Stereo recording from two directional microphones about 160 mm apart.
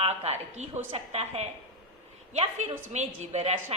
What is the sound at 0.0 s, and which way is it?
A woman's voice, 40° right (ahead or behind).